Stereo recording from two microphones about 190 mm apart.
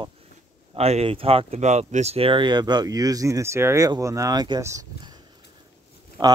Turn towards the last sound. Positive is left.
turn(degrees=-25)  # may be behind; listen again after turning